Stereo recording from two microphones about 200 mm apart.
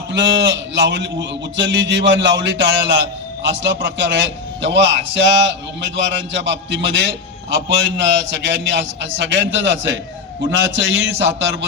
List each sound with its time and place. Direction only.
0.1 s a man's voice: 65° right (ahead or behind)